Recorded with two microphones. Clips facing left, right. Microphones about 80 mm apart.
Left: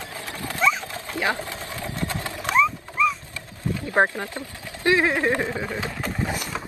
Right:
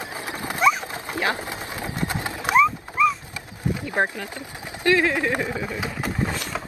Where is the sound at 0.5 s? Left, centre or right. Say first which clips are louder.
Right 3 dB; centre.